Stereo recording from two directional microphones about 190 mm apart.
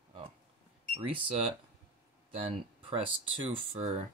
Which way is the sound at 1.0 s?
25° right (ahead or behind).